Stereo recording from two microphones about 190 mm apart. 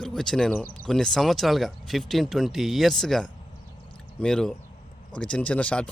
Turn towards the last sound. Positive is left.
turn(degrees=5)  # may be behind; listen again after turning